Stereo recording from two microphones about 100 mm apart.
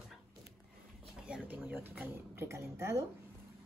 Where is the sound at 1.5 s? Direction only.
20° right (ahead or behind).